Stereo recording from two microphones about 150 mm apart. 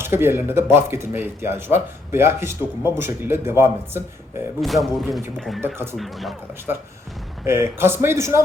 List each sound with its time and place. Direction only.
0.0 s speech: 15° right (ahead or behind)
4.6 s speech: centre (ahead or behind)
5.6 s speech: 15° right (ahead or behind)
6.0 s speech: centre (ahead or behind)
7.4 s speech: 15° right (ahead or behind)